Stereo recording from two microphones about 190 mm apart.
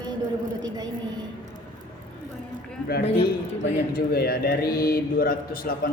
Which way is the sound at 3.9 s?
55° left (ahead or behind).